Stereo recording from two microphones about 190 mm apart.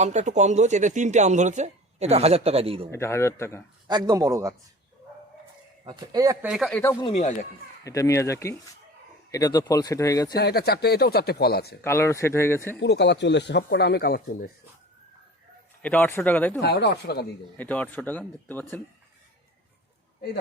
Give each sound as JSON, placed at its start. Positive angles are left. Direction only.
{"t": 0.0, "sound": "speech", "side_deg": -40}
{"t": 2.9, "sound": "speech", "side_deg": 15}
{"t": 3.8, "sound": "a man's voice", "side_deg": -20}
{"t": 5.8, "sound": "a man's voice", "side_deg": -20}
{"t": 6.5, "sound": "speech", "side_deg": 0}
{"t": 7.0, "sound": "speech", "side_deg": 35}
{"t": 7.9, "sound": "speech", "side_deg": 15}
{"t": 10.3, "sound": "speech", "side_deg": 60}
{"t": 11.8, "sound": "speech", "side_deg": 15}
{"t": 12.8, "sound": "speech", "side_deg": 65}
{"t": 15.8, "sound": "speech", "side_deg": 10}
{"t": 16.6, "sound": "speech", "side_deg": 60}
{"t": 17.6, "sound": "speech", "side_deg": 10}